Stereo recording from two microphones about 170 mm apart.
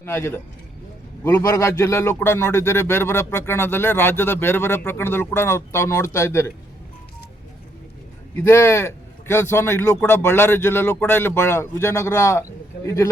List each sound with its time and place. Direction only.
0.0 s a man's voice: 15° left (ahead or behind)
8.4 s a man's voice: 15° left (ahead or behind)